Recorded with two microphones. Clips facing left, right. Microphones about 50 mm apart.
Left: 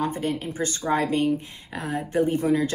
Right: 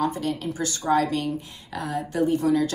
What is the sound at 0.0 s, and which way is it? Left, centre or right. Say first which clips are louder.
Speech: right 1 dB; left.